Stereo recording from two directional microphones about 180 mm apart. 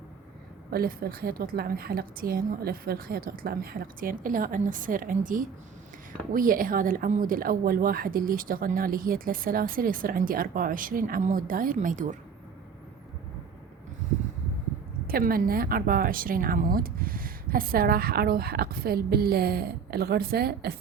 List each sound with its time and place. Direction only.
0.7 s speech: 55° right (ahead or behind)
15.0 s speech: 55° right (ahead or behind)